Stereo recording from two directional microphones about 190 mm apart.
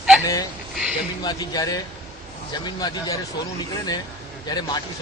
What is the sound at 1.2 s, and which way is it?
Speech, 20° left (ahead or behind).